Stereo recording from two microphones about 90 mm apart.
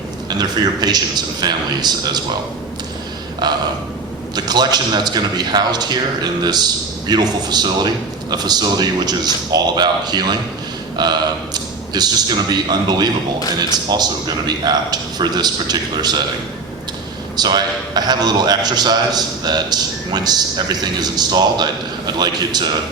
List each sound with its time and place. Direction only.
0.3 s a man's voice: 50° right (ahead or behind)
3.4 s a man's voice: 50° right (ahead or behind)
17.3 s a man's voice: 50° right (ahead or behind)